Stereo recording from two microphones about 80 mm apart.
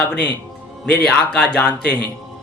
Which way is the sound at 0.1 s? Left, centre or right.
Centre.